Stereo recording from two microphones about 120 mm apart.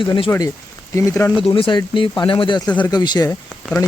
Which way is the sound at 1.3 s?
50° left (ahead or behind).